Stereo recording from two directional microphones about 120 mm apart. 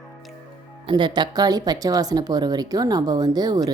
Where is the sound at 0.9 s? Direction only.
40° right (ahead or behind).